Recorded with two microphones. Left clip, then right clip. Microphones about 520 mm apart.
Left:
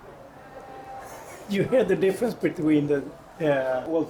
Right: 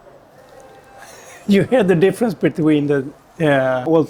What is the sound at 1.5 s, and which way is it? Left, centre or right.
Speech, right.